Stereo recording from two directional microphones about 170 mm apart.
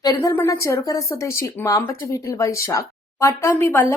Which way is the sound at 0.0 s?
20° left (ahead or behind).